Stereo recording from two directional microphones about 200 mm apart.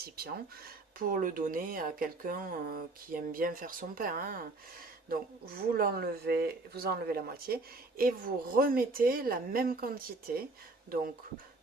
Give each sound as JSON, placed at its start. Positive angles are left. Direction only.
{"t": 0.0, "sound": "speech", "side_deg": -50}